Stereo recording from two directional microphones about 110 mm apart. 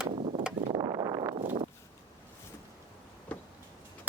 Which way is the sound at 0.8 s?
35° right (ahead or behind).